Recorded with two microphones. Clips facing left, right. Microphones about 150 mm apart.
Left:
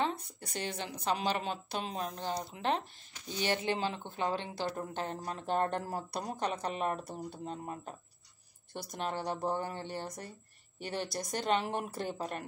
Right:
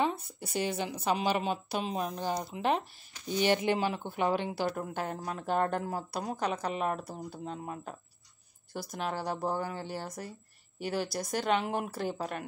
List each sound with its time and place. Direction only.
0.0 s a woman's voice: 5° right (ahead or behind)
8.7 s speech: 5° right (ahead or behind)